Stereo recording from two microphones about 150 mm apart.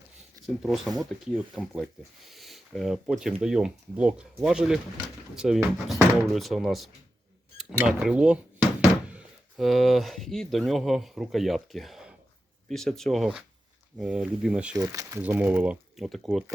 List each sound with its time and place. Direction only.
0.4 s speech: centre (ahead or behind)
14.8 s speech: 20° right (ahead or behind)
15.2 s speech: 10° right (ahead or behind)